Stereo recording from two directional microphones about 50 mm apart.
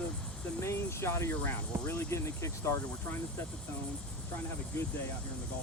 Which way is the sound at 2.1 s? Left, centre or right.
Left.